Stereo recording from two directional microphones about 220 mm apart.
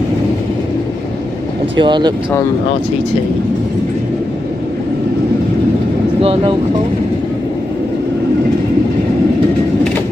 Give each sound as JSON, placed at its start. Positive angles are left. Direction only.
{"t": 1.8, "sound": "speech", "side_deg": -20}
{"t": 6.2, "sound": "speech", "side_deg": -25}